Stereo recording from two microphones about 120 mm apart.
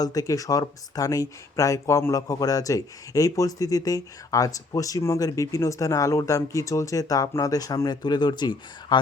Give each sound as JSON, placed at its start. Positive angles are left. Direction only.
{"t": 0.0, "sound": "speech", "side_deg": 30}